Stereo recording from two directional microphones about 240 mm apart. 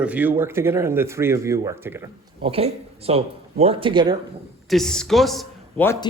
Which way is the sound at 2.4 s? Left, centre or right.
Right.